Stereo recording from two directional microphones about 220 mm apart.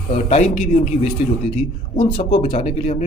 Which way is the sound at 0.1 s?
30° left (ahead or behind).